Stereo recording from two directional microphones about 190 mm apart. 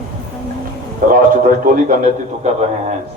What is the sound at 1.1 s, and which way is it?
Speech, 45° right (ahead or behind).